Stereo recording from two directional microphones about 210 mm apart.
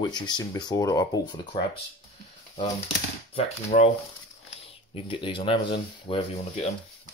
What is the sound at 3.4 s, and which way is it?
Speech, 30° left (ahead or behind).